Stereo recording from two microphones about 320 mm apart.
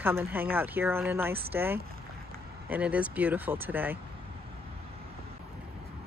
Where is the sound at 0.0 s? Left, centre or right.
Centre.